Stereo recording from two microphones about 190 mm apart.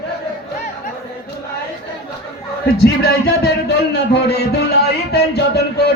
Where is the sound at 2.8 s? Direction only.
60° left (ahead or behind).